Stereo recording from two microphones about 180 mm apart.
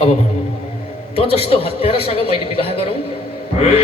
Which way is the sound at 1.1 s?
30° left (ahead or behind).